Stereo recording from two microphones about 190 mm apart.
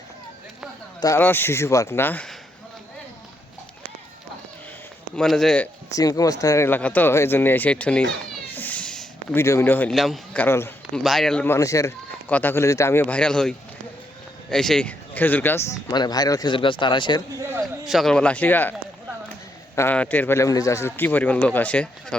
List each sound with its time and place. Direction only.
1.0 s speech: 15° left (ahead or behind)
5.1 s speech: centre (ahead or behind)
5.9 s speech: 20° left (ahead or behind)
8.4 s a sound: 10° left (ahead or behind)
11.0 s speech: centre (ahead or behind)
15.9 s a man's voice: 20° left (ahead or behind)
17.8 s speech: centre (ahead or behind)